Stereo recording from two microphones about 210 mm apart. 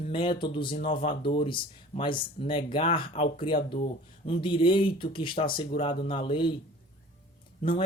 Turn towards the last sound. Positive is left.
turn(degrees=25)  # may be behind; listen again after turning